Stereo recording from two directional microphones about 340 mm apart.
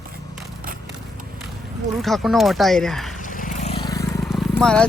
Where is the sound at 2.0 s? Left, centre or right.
Centre.